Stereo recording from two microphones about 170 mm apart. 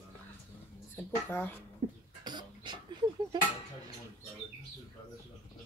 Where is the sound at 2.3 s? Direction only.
25° right (ahead or behind).